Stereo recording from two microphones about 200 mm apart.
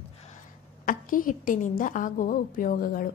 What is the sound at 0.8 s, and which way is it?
A woman's voice, 40° left (ahead or behind).